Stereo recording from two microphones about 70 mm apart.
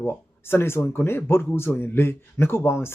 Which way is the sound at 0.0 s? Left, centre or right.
Left.